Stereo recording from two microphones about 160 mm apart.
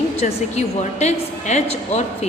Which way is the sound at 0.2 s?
45° left (ahead or behind).